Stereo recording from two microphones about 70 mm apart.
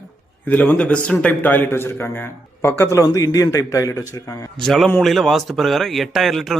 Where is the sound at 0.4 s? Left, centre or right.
Left.